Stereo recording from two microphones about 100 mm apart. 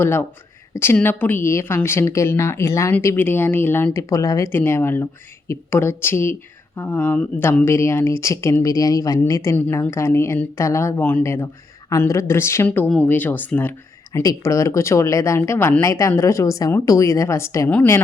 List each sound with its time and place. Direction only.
0.0 s speech: 20° left (ahead or behind)
3.9 s speech: 30° left (ahead or behind)
9.6 s speech: 20° left (ahead or behind)
12.6 s speech: 15° left (ahead or behind)
14.1 s speech: 35° left (ahead or behind)